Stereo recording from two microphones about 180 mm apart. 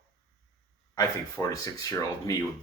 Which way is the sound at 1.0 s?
20° left (ahead or behind).